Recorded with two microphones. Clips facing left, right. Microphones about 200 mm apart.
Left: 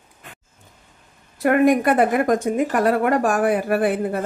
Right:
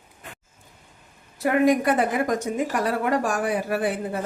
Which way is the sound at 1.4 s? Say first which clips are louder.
Left 3 dB; 55° left (ahead or behind).